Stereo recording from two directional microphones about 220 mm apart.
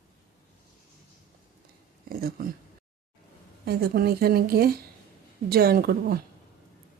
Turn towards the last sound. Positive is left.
turn(degrees=-45)  # may be behind; listen again after turning